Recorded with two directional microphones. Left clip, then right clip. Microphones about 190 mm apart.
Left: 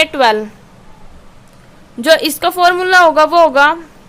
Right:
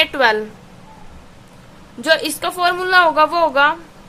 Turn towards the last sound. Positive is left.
turn(degrees=30)  # may be behind; listen again after turning